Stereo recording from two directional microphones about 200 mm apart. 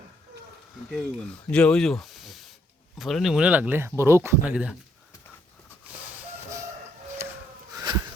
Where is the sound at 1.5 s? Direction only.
5° left (ahead or behind).